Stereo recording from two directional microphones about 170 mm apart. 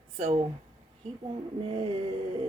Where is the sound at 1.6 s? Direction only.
30° right (ahead or behind).